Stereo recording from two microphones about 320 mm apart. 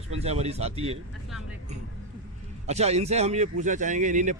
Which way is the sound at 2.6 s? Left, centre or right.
Centre.